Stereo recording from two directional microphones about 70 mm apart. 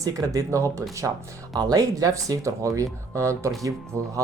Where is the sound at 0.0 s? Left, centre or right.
Right.